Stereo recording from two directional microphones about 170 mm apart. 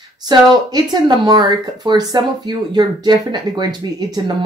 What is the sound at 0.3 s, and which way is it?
Speech, 25° right (ahead or behind).